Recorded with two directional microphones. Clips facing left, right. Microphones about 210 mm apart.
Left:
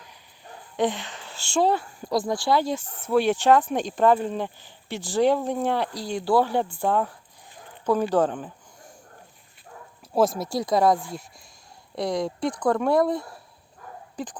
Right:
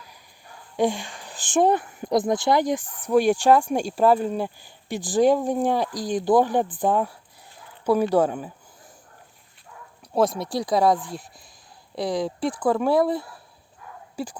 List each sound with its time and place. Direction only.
0.8 s speech: 10° right (ahead or behind)
10.2 s speech: centre (ahead or behind)
13.8 s dog: 45° left (ahead or behind)
14.2 s speech: 10° right (ahead or behind)